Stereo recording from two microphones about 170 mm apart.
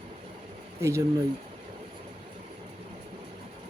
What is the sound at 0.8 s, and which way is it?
Speech, 15° right (ahead or behind).